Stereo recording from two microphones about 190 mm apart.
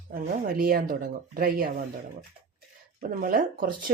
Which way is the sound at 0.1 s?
50° right (ahead or behind).